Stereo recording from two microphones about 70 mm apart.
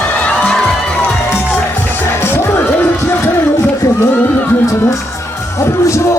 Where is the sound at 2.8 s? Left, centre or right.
Left.